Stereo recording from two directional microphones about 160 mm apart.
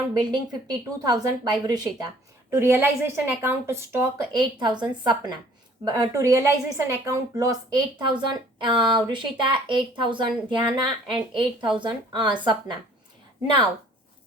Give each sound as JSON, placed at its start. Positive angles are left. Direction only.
{"t": 0.2, "sound": "a woman's voice", "side_deg": -25}
{"t": 4.3, "sound": "a woman's voice", "side_deg": -25}